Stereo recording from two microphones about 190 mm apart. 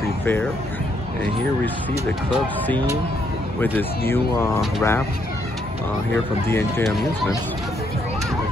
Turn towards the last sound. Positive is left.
turn(degrees=10)  # may be behind; listen again after turning